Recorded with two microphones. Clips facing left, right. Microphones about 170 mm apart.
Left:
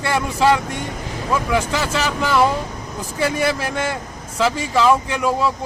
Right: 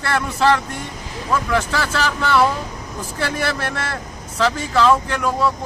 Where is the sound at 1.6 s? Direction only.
30° left (ahead or behind).